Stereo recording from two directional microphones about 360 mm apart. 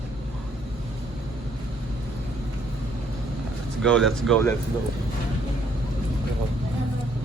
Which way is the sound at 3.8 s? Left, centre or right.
Centre.